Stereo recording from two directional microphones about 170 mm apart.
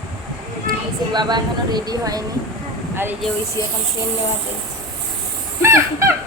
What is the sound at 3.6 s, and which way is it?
Speech, 20° left (ahead or behind).